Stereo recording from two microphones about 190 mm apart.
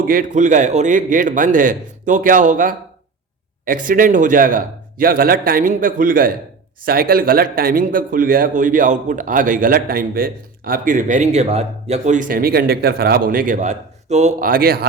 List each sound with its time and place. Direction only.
0.0 s a man's voice: 45° right (ahead or behind)